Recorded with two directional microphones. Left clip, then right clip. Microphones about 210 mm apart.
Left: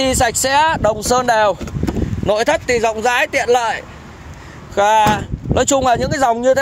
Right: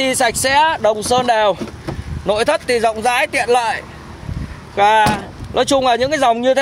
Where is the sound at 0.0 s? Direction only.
15° left (ahead or behind).